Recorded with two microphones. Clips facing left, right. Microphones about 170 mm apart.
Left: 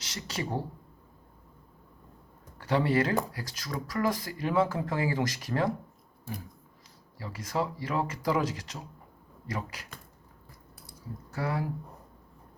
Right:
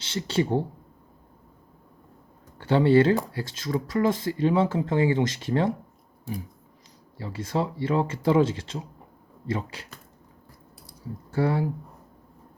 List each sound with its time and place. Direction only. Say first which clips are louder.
0.0 s speech: right 10 dB; 30° right (ahead or behind)
2.6 s speech: right 7 dB; 25° right (ahead or behind)
7.2 s speech: right 4 dB; 25° right (ahead or behind)
11.3 s speech: right 8 dB; 30° right (ahead or behind)